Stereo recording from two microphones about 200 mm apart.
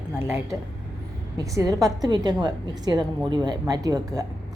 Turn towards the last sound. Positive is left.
turn(degrees=-20)  # may be behind; listen again after turning